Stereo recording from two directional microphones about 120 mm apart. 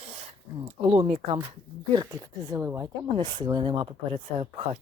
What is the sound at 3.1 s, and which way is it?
Speech, 40° right (ahead or behind).